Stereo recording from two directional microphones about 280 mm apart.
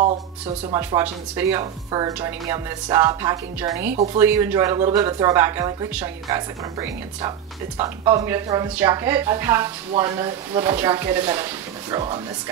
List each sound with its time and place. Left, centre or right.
0.7 s speech: centre
3.9 s speech: right
4.2 s speech: centre